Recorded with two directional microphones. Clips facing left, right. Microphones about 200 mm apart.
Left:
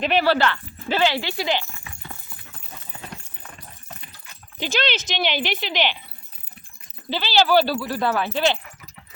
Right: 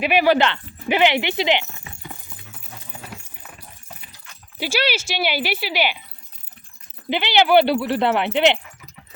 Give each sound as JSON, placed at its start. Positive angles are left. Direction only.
{"t": 0.0, "sound": "speech", "side_deg": -10}
{"t": 3.1, "sound": "clip-clop", "side_deg": -10}
{"t": 7.1, "sound": "speech", "side_deg": -20}